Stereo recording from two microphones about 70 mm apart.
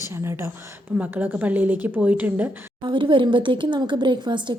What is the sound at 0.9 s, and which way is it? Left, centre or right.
A woman's voice, right.